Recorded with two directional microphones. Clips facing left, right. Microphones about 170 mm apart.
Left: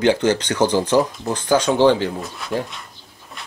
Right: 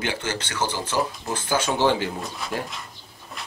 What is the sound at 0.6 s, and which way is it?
Speech, 15° left (ahead or behind).